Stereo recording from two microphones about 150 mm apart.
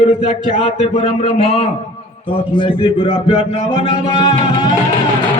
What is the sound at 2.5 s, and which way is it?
A man's voice, 35° left (ahead or behind).